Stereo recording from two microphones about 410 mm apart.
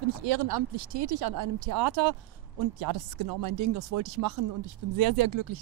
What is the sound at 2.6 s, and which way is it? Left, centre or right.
Speech, right.